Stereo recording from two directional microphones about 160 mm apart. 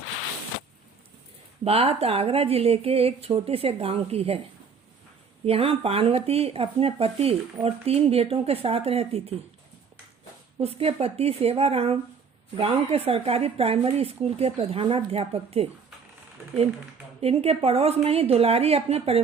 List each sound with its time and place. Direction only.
1.6 s speech: 40° right (ahead or behind)
5.5 s speech: 35° right (ahead or behind)
10.6 s speech: 40° right (ahead or behind)
17.2 s speech: 40° right (ahead or behind)